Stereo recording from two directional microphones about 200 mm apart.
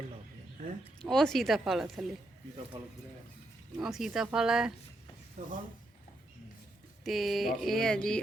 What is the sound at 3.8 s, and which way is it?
Speech, centre (ahead or behind).